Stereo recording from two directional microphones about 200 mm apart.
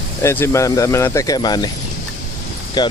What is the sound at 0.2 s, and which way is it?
Speech, 15° left (ahead or behind).